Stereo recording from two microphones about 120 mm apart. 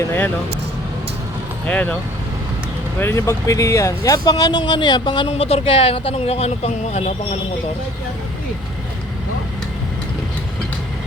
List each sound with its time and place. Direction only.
1.6 s speech: 10° left (ahead or behind)
3.0 s speech: 20° left (ahead or behind); by 5.3 s 40° left (ahead or behind)
5.3 s speech: 60° left (ahead or behind)